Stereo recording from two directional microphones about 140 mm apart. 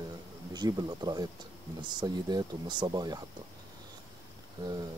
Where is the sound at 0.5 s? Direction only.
30° right (ahead or behind).